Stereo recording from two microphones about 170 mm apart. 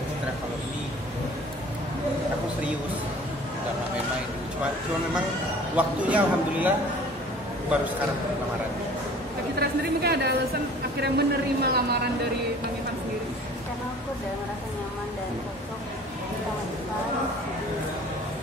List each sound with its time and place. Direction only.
5.8 s a man's voice: 10° right (ahead or behind)
9.6 s speech: 70° right (ahead or behind)